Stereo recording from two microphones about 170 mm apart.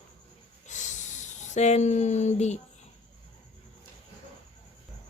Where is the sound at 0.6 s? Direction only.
45° left (ahead or behind).